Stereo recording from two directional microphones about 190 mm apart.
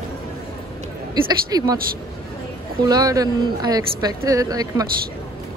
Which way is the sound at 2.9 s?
20° right (ahead or behind).